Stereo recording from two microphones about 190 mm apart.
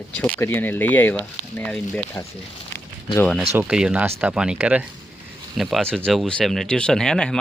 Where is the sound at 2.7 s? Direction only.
10° left (ahead or behind).